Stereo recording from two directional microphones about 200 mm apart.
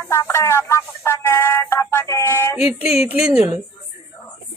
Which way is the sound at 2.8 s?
30° left (ahead or behind).